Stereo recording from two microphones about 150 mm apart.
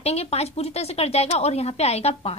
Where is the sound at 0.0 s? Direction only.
45° left (ahead or behind).